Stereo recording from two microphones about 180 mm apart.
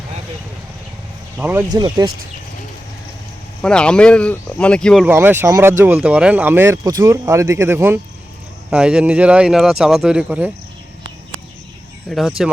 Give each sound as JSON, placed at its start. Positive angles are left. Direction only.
{"t": 1.4, "sound": "speech", "side_deg": -10}
{"t": 1.7, "sound": "speech", "side_deg": -20}
{"t": 3.6, "sound": "speech", "side_deg": 5}
{"t": 5.0, "sound": "speech", "side_deg": -10}
{"t": 12.0, "sound": "speech", "side_deg": 0}